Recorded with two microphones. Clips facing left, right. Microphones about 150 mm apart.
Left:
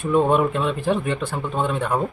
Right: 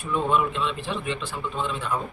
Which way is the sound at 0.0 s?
50° left (ahead or behind).